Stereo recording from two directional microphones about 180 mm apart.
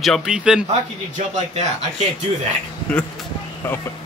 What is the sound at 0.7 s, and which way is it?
Speech, 40° right (ahead or behind).